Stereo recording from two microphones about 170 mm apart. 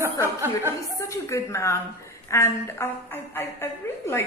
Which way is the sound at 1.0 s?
15° left (ahead or behind).